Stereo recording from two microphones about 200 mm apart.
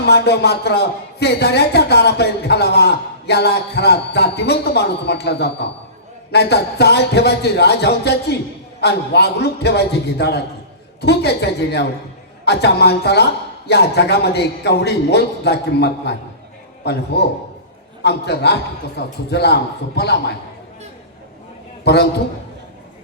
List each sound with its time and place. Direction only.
0.0 s a man's voice: 55° left (ahead or behind)
21.9 s a man's voice: 55° left (ahead or behind)